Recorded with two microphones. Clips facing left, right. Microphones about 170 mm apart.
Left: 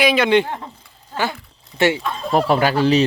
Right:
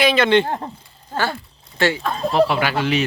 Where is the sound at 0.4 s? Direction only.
45° right (ahead or behind).